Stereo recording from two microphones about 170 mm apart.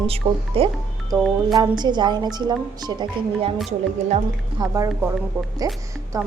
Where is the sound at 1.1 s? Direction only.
Centre (ahead or behind).